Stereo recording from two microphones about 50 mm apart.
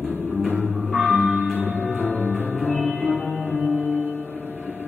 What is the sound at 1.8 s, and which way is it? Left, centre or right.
Music, left.